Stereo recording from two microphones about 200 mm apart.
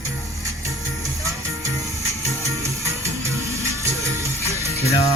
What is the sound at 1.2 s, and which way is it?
Music, 15° right (ahead or behind).